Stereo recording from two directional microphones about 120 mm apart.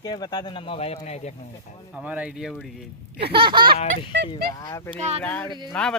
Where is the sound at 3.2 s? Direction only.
45° right (ahead or behind).